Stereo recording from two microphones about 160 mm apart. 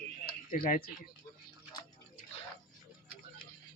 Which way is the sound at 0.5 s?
55° left (ahead or behind).